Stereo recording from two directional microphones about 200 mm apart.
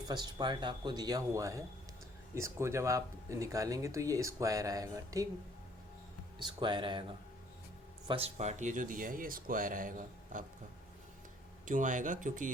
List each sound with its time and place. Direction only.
0.1 s speech: 20° right (ahead or behind)
6.4 s speech: 25° right (ahead or behind)
8.0 s speech: 30° right (ahead or behind)
11.6 s speech: 40° right (ahead or behind)